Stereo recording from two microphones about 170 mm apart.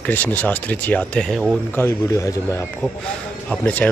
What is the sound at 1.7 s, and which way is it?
Speech, 15° left (ahead or behind).